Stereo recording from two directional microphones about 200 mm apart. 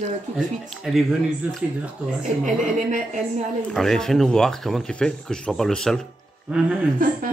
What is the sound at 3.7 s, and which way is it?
Speech, centre (ahead or behind).